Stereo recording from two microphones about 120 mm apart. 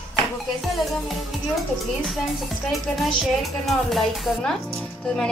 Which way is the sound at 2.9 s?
Centre (ahead or behind).